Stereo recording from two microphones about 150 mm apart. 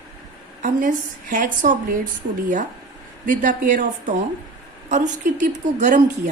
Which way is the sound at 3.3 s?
60° right (ahead or behind).